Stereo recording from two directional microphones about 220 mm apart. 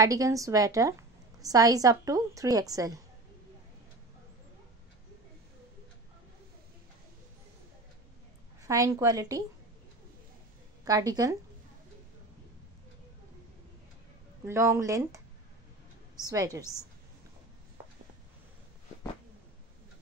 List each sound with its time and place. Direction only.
0.0 s a woman's voice: 15° right (ahead or behind)
8.6 s a woman's voice: 15° right (ahead or behind)
10.9 s a woman's voice: 15° right (ahead or behind)
14.4 s a woman's voice: 10° right (ahead or behind)
16.3 s a woman's voice: 15° right (ahead or behind)